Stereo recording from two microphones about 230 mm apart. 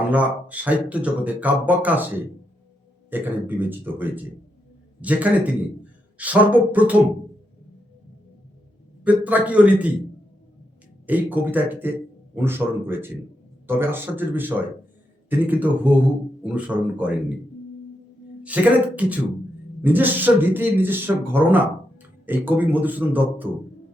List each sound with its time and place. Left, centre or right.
0.1 s a man's voice: centre
9.0 s speech: centre
11.0 s speech: centre
18.4 s speech: centre